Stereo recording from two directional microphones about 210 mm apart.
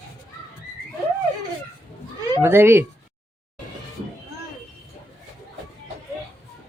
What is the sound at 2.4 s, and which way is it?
Speech, 10° right (ahead or behind).